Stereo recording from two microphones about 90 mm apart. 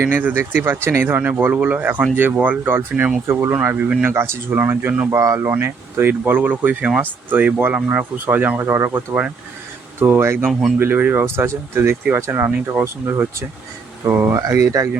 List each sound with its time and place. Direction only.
0.0 s speech: 20° right (ahead or behind)